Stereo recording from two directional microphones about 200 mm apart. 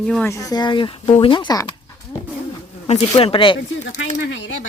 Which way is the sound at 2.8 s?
30° left (ahead or behind).